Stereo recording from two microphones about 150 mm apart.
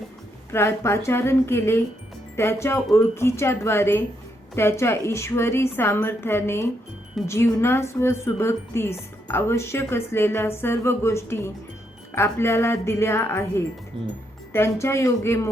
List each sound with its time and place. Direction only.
0.5 s speech: 15° left (ahead or behind)